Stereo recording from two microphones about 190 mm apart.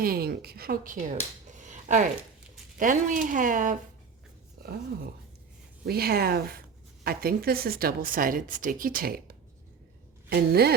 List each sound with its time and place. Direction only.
0.0 s speech: 50° right (ahead or behind)
5.8 s speech: 55° right (ahead or behind)